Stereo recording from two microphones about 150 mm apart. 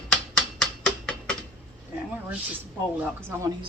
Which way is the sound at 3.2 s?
15° right (ahead or behind).